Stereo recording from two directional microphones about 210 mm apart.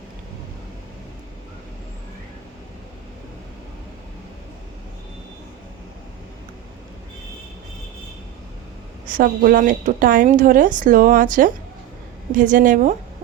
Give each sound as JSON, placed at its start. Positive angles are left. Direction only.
{"t": 9.0, "sound": "a woman's voice", "side_deg": -40}